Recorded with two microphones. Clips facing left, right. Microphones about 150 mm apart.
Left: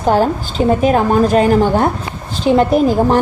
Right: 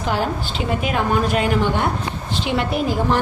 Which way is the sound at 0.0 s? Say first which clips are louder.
Left 8 dB; 45° left (ahead or behind).